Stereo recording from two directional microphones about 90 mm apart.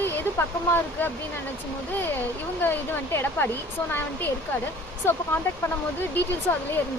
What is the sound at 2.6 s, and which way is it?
Speech, 25° left (ahead or behind).